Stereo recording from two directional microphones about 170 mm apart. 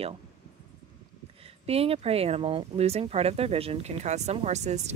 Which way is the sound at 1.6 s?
35° right (ahead or behind).